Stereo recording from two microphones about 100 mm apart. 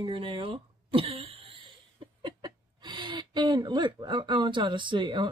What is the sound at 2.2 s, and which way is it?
Speech, 50° right (ahead or behind).